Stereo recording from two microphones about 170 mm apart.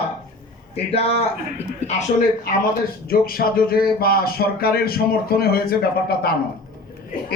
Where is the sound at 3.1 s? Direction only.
60° left (ahead or behind).